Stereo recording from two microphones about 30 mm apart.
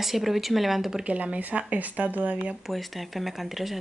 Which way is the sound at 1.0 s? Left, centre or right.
Right.